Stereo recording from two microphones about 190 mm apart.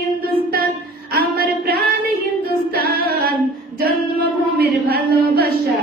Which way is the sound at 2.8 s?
50° right (ahead or behind).